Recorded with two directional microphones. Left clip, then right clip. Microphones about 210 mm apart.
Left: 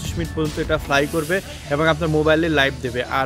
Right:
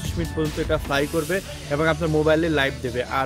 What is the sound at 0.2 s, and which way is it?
Speech, centre (ahead or behind).